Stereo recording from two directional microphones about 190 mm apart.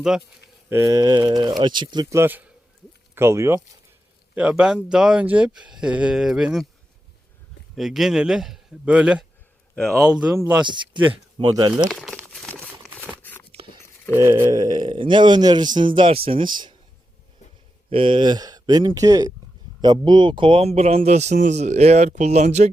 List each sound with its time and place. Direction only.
0.7 s speech: 15° right (ahead or behind)
7.8 s speech: centre (ahead or behind)
9.7 s speech: 5° left (ahead or behind)
10.2 s speech: 5° right (ahead or behind)
10.6 s speech: 25° right (ahead or behind)
11.9 s crumpling: centre (ahead or behind)
14.2 s speech: 15° right (ahead or behind)
17.9 s a man's voice: 25° right (ahead or behind)